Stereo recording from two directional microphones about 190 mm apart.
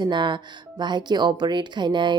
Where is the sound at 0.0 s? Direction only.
25° right (ahead or behind).